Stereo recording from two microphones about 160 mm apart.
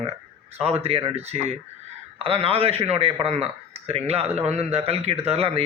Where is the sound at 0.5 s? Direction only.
40° right (ahead or behind).